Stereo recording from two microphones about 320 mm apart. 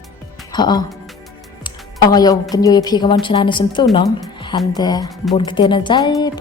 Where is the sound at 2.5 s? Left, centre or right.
Centre.